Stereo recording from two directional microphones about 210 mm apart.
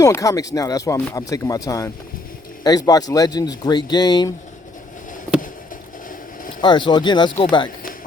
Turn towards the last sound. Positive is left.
turn(degrees=25)  # may be behind; listen again after turning